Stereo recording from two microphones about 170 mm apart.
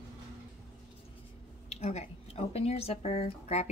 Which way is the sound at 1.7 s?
40° left (ahead or behind).